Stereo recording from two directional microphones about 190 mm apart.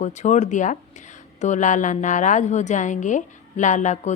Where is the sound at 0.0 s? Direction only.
40° left (ahead or behind).